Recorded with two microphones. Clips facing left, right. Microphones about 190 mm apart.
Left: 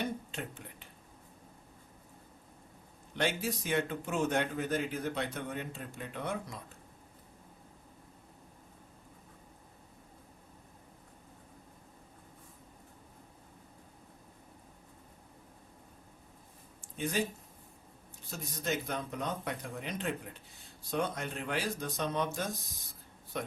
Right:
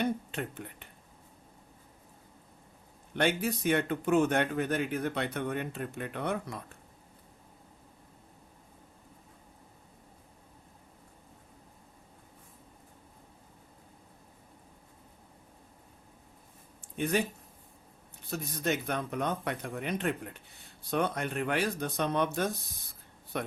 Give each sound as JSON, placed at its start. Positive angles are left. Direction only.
{"t": 0.0, "sound": "whispering", "side_deg": -60}
{"t": 3.2, "sound": "speech", "side_deg": -60}
{"t": 17.0, "sound": "speech", "side_deg": -60}
{"t": 18.3, "sound": "speech", "side_deg": -60}